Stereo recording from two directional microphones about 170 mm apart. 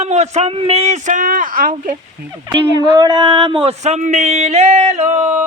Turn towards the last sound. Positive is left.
turn(degrees=-40)  # may be behind; listen again after turning